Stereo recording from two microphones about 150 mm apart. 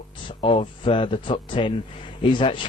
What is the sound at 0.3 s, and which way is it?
Speech, 35° left (ahead or behind).